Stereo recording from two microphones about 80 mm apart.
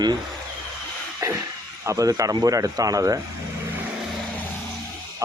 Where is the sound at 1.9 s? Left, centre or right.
Right.